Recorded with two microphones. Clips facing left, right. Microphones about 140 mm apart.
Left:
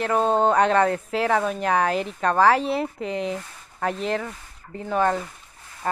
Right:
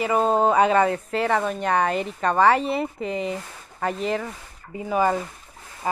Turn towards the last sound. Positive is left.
turn(degrees=-5)  # may be behind; listen again after turning